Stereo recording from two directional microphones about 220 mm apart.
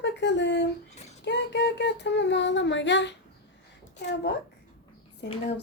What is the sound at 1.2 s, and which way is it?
Speech, 50° left (ahead or behind).